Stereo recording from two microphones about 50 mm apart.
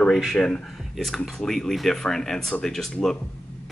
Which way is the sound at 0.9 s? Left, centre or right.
Centre.